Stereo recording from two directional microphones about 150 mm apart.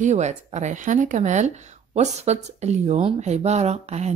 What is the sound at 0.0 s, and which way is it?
A woman's voice, 50° right (ahead or behind).